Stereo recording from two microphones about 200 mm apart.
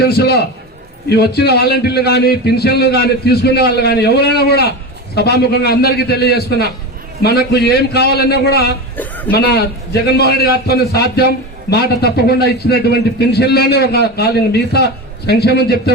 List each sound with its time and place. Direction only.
0.0 s a man's voice: 55° left (ahead or behind)
9.0 s a sound: 10° left (ahead or behind)
9.3 s a man's voice: 50° left (ahead or behind)